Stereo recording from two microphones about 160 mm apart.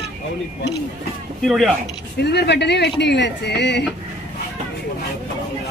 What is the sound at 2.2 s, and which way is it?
Speech, 90° left.